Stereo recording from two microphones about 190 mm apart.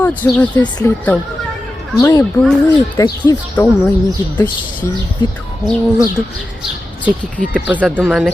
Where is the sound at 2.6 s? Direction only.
15° left (ahead or behind).